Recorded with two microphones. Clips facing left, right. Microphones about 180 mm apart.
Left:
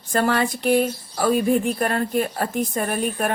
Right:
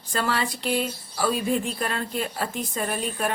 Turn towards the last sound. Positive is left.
turn(degrees=50)  # may be behind; listen again after turning